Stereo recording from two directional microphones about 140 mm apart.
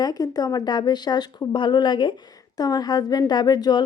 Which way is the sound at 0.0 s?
25° left (ahead or behind).